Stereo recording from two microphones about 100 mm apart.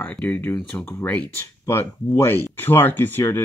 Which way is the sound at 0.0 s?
15° left (ahead or behind).